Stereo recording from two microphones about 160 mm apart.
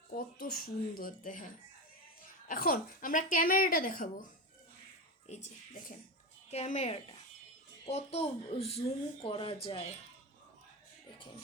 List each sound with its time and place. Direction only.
0.3 s speech: 70° left (ahead or behind)
2.5 s speech: 60° left (ahead or behind)
5.3 s speech: 45° left (ahead or behind)
6.5 s speech: 45° left (ahead or behind)